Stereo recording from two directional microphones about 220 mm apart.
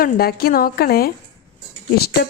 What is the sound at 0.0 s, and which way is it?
A woman's voice, 45° left (ahead or behind).